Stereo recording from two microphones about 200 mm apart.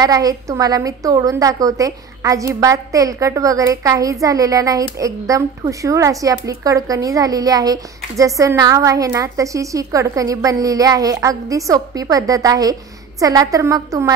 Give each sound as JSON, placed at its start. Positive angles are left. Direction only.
{"t": 0.0, "sound": "a woman's voice", "side_deg": -20}